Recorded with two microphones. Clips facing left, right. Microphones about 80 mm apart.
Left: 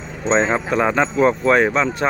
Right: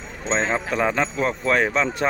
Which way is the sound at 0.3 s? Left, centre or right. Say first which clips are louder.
Left 5 dB; left.